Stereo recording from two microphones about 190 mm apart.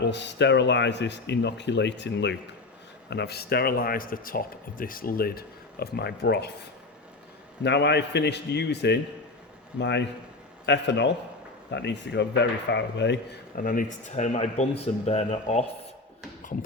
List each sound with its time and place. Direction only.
0.0 s speech: 65° left (ahead or behind)
7.6 s a man's voice: 65° left (ahead or behind)
13.6 s speech: 45° left (ahead or behind)
14.3 s speech: 35° left (ahead or behind)
16.4 s music: 40° left (ahead or behind)